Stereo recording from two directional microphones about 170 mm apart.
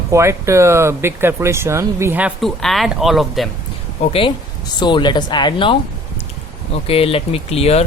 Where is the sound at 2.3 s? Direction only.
Centre (ahead or behind).